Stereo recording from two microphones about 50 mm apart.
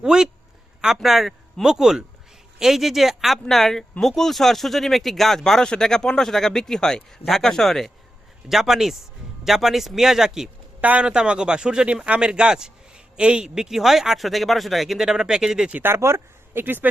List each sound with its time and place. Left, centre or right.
0.0 s a man's voice: centre
1.0 s speech: centre
3.5 s speech: centre
8.4 s speech: centre
10.8 s a man's voice: right
15.8 s speech: right
16.6 s speech: right